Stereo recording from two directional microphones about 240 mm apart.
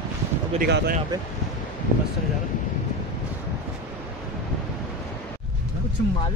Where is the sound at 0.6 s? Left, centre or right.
Right.